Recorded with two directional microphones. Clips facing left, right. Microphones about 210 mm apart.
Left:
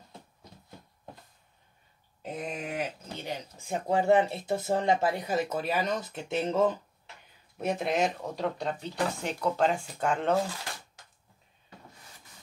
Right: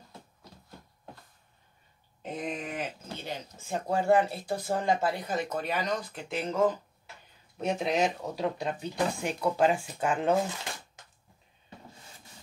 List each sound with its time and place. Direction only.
2.4 s a sound: 5° left (ahead or behind)
3.3 s speech: 15° left (ahead or behind)
5.3 s speech: 5° left (ahead or behind)
5.8 s speech: 25° left (ahead or behind)
7.5 s speech: 5° left (ahead or behind)
10.3 s speech: 20° right (ahead or behind)